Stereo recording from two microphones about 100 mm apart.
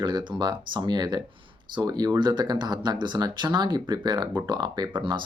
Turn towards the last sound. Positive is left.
turn(degrees=-50)  # may be behind; listen again after turning